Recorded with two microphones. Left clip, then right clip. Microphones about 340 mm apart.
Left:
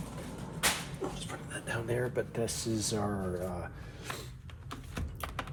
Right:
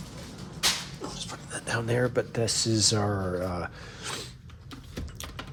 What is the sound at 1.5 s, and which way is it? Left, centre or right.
Speech, right.